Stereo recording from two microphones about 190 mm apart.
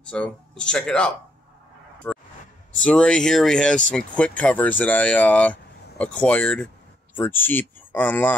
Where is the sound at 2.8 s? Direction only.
5° left (ahead or behind).